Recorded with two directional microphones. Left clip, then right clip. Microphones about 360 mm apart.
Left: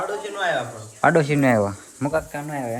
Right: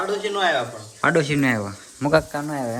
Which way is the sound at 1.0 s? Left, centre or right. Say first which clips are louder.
Left 2 dB; centre.